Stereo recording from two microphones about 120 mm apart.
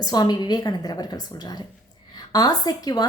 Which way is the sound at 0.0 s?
35° left (ahead or behind).